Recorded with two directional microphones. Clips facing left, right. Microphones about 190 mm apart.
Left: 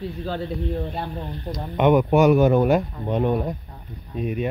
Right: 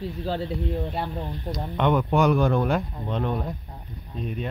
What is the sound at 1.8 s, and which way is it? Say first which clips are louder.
Speech: left 5 dB; 15° left (ahead or behind).